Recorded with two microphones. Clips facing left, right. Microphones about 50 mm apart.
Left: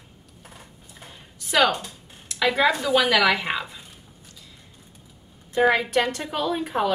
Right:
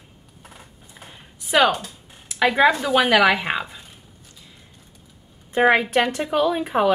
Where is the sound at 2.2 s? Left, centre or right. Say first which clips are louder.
Right 4 dB; centre.